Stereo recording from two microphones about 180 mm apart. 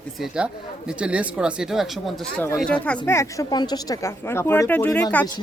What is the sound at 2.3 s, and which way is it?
Speech, 10° left (ahead or behind).